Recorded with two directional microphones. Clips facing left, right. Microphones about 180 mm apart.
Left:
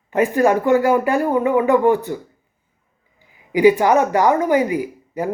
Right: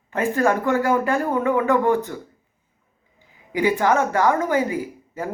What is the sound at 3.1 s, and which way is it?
A woman's voice, 10° left (ahead or behind).